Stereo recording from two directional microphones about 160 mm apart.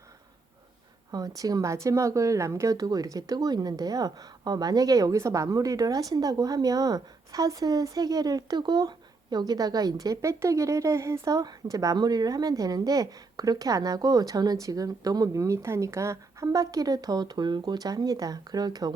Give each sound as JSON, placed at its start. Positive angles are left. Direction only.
{"t": 1.4, "sound": "speech", "side_deg": -20}